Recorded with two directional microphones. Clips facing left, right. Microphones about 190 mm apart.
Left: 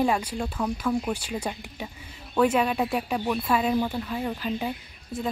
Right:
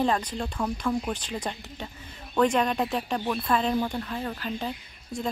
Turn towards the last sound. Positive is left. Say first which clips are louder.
# left 1 dB
turn(degrees=5)  # may be behind; listen again after turning